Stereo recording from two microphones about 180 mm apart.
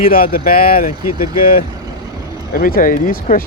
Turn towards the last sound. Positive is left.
turn(degrees=50)  # may be behind; listen again after turning